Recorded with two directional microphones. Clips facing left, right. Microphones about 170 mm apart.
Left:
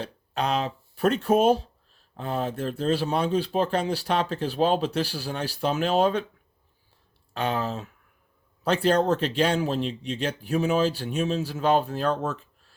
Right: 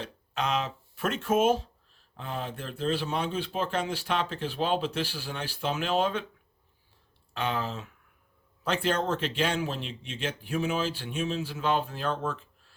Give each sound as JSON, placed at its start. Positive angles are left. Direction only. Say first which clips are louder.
{"t": 0.0, "sound": "speech", "louder": "left 4 dB", "side_deg": 35}
{"t": 7.3, "sound": "speech", "louder": "left 4 dB", "side_deg": 40}